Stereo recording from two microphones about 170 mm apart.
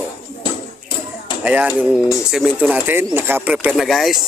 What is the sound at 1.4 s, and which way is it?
Speech, 10° right (ahead or behind).